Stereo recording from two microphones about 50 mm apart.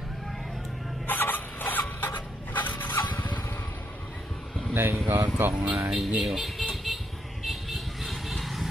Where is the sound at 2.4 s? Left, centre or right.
Left.